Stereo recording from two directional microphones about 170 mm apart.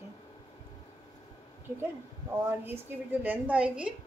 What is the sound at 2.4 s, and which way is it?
A woman's voice, 15° right (ahead or behind).